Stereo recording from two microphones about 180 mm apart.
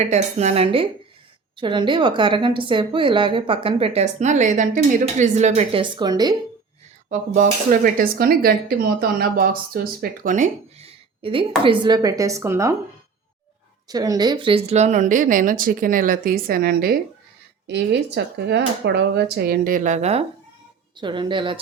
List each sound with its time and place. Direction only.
0.1 s a woman's voice: 35° right (ahead or behind); by 6.3 s 20° right (ahead or behind)
7.3 s a woman's voice: 50° right (ahead or behind); by 12.7 s 15° right (ahead or behind)
13.8 s speech: 20° right (ahead or behind); by 16.9 s 55° right (ahead or behind)
17.7 s speech: 70° right (ahead or behind); by 20.2 s 35° right (ahead or behind)
20.9 s a woman's voice: 25° right (ahead or behind)